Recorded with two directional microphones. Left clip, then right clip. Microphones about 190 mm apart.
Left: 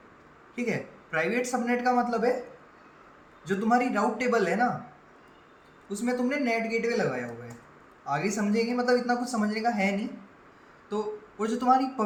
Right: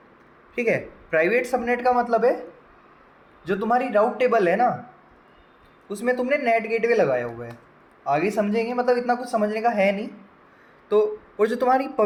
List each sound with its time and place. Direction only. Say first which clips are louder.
0.5 s a man's voice: right 9 dB; 45° right (ahead or behind)
3.5 s a man's voice: right 5 dB; 40° right (ahead or behind)
5.9 s a man's voice: right 7 dB; 45° right (ahead or behind)